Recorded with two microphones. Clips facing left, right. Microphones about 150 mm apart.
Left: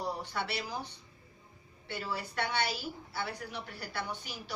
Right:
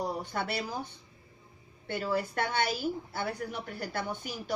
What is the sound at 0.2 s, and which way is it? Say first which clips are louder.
Speech: right 3 dB; 50° right (ahead or behind).